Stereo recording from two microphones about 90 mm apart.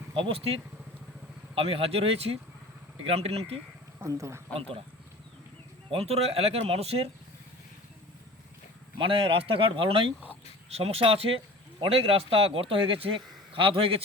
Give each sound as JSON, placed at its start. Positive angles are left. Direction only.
{"t": 0.1, "sound": "a man's voice", "side_deg": -90}
{"t": 4.0, "sound": "speech", "side_deg": -35}
{"t": 5.9, "sound": "a man's voice", "side_deg": -90}
{"t": 9.0, "sound": "a man's voice", "side_deg": -80}